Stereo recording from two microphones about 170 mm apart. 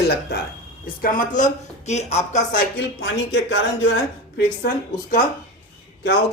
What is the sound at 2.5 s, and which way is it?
Speech, 90° left.